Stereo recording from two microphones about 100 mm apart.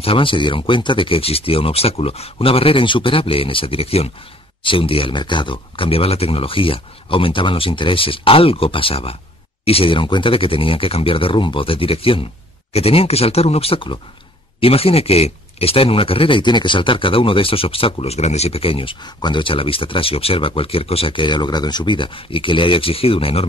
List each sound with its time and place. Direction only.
0.0 s speech: 60° left (ahead or behind); by 4.1 s 80° left
4.6 s speech: 65° left (ahead or behind)
12.7 s speech: 85° left; by 18.9 s 65° left (ahead or behind)
19.0 s speech: 50° left (ahead or behind); by 23.4 s 70° left (ahead or behind)